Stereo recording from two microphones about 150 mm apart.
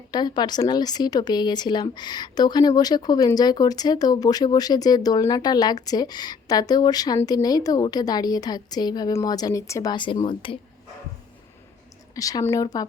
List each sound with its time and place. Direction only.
0.1 s speech: 30° left (ahead or behind)
9.9 s speech: 30° left (ahead or behind)
12.1 s speech: 25° left (ahead or behind)